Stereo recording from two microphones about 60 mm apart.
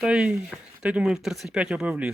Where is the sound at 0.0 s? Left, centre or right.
Centre.